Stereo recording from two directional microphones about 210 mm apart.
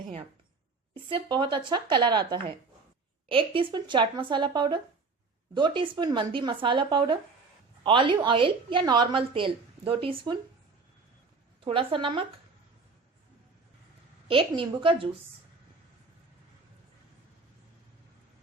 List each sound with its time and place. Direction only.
1.1 s a woman's voice: 20° right (ahead or behind)
11.6 s a woman's voice: 25° right (ahead or behind)
14.3 s a woman's voice: 25° right (ahead or behind)